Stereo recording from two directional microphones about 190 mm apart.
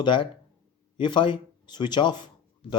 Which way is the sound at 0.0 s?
25° left (ahead or behind).